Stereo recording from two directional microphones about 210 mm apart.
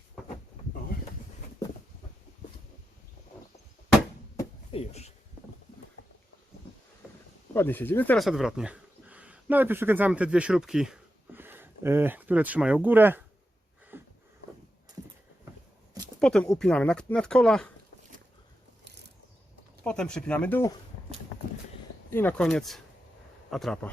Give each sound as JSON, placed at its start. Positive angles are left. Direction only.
{"t": 4.7, "sound": "a sound", "side_deg": 30}
{"t": 7.5, "sound": "speech", "side_deg": 10}
{"t": 13.9, "sound": "a sound", "side_deg": -10}
{"t": 16.2, "sound": "speech", "side_deg": 5}
{"t": 19.8, "sound": "speech", "side_deg": 5}
{"t": 22.1, "sound": "speech", "side_deg": 10}